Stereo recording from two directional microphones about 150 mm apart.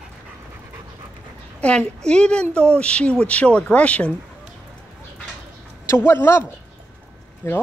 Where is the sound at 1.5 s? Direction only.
5° left (ahead or behind).